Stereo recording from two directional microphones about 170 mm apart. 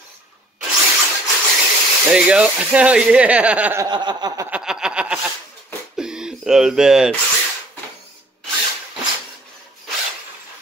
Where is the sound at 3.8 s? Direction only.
25° right (ahead or behind).